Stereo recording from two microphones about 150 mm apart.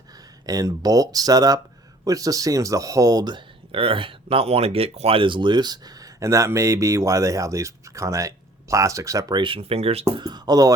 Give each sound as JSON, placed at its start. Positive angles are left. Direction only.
{"t": 0.4, "sound": "speech", "side_deg": -25}
{"t": 9.4, "sound": "speech", "side_deg": -35}
{"t": 10.2, "sound": "speech", "side_deg": -25}